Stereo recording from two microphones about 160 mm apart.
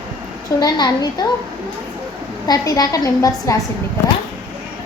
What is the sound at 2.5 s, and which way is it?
A woman's voice, 25° left (ahead or behind).